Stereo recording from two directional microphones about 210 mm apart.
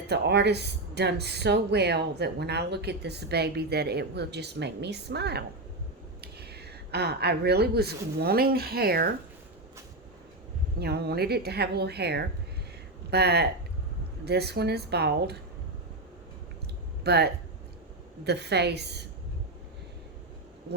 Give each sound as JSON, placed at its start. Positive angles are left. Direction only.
{"t": 0.1, "sound": "speech", "side_deg": -55}
{"t": 10.8, "sound": "speech", "side_deg": -50}
{"t": 17.0, "sound": "speech", "side_deg": -50}